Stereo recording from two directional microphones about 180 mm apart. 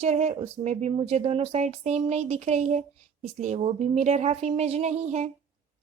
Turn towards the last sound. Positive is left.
turn(degrees=-35)  # may be behind; listen again after turning